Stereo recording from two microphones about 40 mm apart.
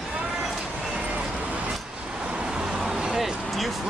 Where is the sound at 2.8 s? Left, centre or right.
Centre.